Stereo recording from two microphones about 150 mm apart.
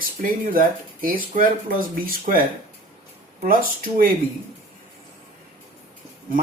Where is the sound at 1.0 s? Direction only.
70° right (ahead or behind).